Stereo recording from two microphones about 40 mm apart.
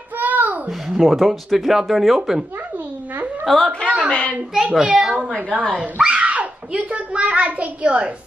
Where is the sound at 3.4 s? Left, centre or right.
Centre.